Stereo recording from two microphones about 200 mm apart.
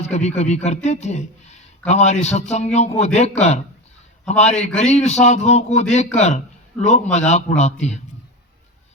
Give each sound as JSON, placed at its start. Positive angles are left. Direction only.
{"t": 0.1, "sound": "a man's voice", "side_deg": 35}